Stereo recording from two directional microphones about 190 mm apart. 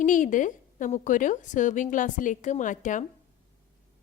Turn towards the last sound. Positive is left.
turn(degrees=40)  # may be behind; listen again after turning